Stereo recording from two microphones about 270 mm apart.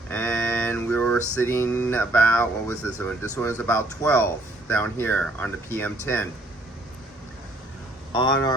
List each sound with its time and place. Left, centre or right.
0.1 s a sound: centre
3.6 s speech: centre
8.1 s speech: centre